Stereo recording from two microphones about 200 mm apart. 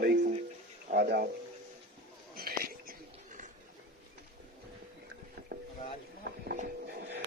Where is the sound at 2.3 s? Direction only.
45° right (ahead or behind).